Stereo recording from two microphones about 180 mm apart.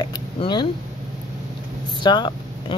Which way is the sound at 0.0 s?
25° left (ahead or behind).